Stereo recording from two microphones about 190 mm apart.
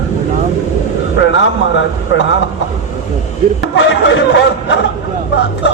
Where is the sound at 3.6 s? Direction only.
75° left (ahead or behind).